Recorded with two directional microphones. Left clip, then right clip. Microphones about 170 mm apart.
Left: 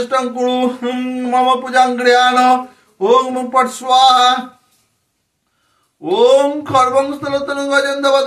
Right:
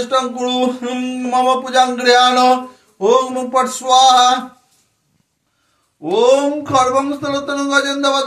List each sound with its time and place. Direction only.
0.1 s speech: 25° right (ahead or behind)
6.1 s speech: 30° right (ahead or behind)